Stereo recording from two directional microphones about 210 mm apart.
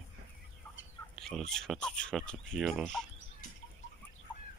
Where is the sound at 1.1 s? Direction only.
Centre (ahead or behind).